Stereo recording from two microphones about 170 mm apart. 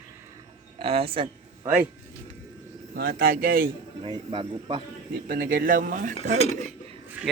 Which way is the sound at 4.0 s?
30° right (ahead or behind).